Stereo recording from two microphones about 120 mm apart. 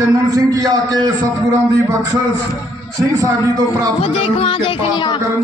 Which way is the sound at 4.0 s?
55° left (ahead or behind).